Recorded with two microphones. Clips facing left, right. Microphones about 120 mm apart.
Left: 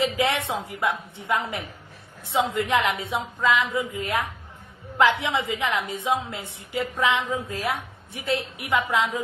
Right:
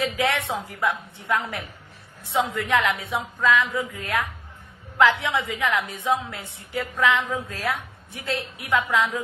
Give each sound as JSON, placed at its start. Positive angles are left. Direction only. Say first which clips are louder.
{"t": 0.0, "sound": "a woman's voice", "louder": "left 1 dB", "side_deg": 25}